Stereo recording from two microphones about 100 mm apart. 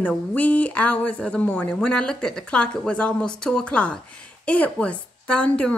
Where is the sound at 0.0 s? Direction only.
15° left (ahead or behind).